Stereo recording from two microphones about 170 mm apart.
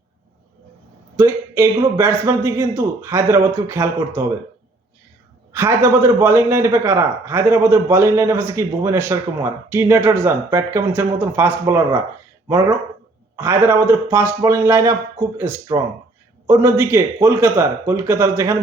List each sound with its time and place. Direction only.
1.1 s a man's voice: 15° right (ahead or behind)
5.5 s a man's voice: 15° right (ahead or behind)
13.3 s a man's voice: 15° right (ahead or behind)